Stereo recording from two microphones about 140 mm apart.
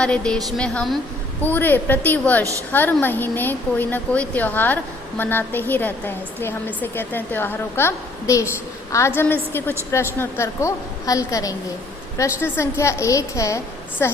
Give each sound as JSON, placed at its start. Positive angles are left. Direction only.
{"t": 0.0, "sound": "a woman's voice", "side_deg": 5}
{"t": 2.4, "sound": "a woman's voice", "side_deg": -20}
{"t": 2.7, "sound": "a woman's voice", "side_deg": 15}